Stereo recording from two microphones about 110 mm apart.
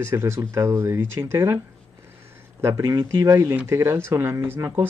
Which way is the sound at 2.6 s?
30° right (ahead or behind).